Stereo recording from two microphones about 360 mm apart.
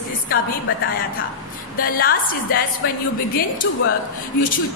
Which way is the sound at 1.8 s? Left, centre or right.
Left.